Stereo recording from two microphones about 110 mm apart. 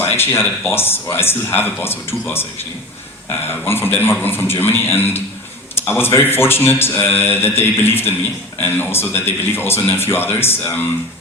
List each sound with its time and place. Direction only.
0.0 s speech: 20° left (ahead or behind)
3.7 s speech: 20° left (ahead or behind)